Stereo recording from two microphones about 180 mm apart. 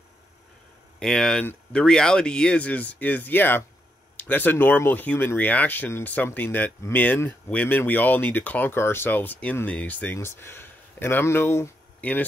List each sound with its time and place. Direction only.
0.9 s speech: 5° left (ahead or behind)